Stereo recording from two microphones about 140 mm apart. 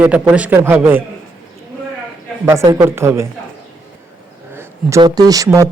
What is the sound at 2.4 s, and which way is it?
Speech, 20° right (ahead or behind).